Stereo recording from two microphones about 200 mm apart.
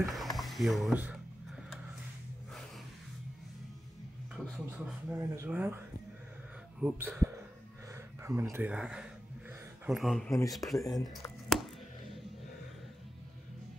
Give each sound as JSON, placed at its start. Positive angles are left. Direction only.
{"t": 0.0, "sound": "speech", "side_deg": 0}
{"t": 4.6, "sound": "speech", "side_deg": -10}
{"t": 6.8, "sound": "speech", "side_deg": -10}
{"t": 10.8, "sound": "speech", "side_deg": 20}
{"t": 11.4, "sound": "music", "side_deg": 0}